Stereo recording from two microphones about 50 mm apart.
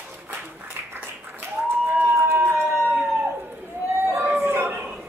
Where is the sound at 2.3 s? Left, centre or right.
Right.